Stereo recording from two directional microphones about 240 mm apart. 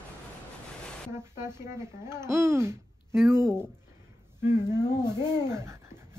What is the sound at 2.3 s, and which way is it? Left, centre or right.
Speech, centre.